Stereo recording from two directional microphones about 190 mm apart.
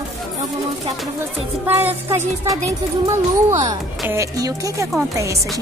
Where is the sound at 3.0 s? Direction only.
15° right (ahead or behind).